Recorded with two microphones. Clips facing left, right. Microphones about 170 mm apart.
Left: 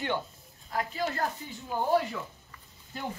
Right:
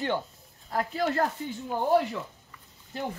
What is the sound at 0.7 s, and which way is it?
Speech, 55° right (ahead or behind).